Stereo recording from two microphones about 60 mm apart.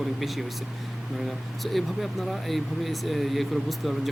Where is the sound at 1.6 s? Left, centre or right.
Centre.